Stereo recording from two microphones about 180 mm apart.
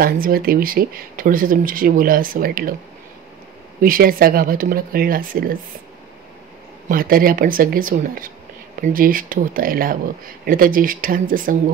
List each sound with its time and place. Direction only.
0.0 s speech: 55° right (ahead or behind)
3.8 s speech: 50° right (ahead or behind)
6.9 s speech: 55° right (ahead or behind)